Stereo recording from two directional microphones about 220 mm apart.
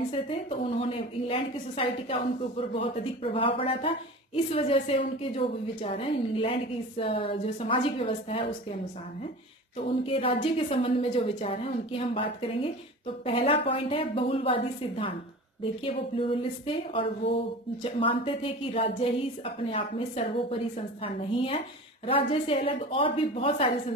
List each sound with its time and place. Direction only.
0.1 s a woman's voice: 25° left (ahead or behind)
10.0 s a woman's voice: 25° left (ahead or behind)